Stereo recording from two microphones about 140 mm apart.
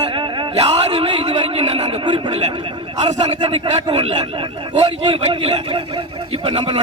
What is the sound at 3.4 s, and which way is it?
A man's voice, 35° right (ahead or behind).